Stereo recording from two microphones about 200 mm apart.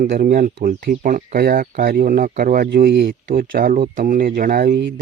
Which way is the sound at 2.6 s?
55° right (ahead or behind).